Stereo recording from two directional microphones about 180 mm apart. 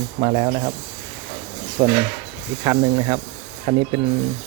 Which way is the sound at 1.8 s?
10° right (ahead or behind).